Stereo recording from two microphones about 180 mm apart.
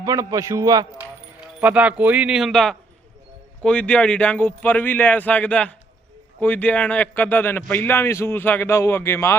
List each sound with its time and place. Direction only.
0.0 s a man's voice: 20° right (ahead or behind)
0.9 s speech: 10° right (ahead or behind); by 9.3 s 15° left (ahead or behind)